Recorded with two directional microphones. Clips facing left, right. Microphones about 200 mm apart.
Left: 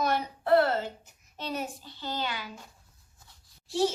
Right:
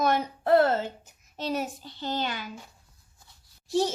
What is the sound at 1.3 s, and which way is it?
A child's voice, 40° right (ahead or behind).